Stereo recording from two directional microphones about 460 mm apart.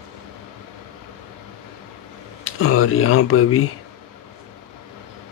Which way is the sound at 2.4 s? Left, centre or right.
Left.